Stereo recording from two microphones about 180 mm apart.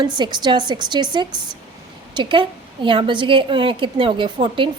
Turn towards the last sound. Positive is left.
turn(degrees=-30)  # may be behind; listen again after turning